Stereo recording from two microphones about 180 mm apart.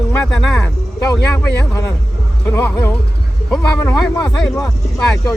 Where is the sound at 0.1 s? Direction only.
5° left (ahead or behind).